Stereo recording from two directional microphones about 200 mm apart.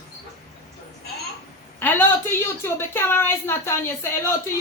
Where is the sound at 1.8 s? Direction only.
10° left (ahead or behind).